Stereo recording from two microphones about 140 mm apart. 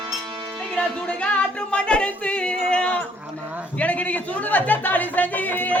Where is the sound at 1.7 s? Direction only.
10° left (ahead or behind).